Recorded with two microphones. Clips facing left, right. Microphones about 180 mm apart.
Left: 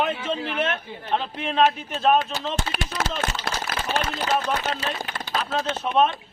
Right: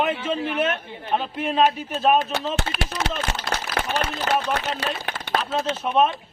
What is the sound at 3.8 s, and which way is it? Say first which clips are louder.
Speech: even; 60° right (ahead or behind).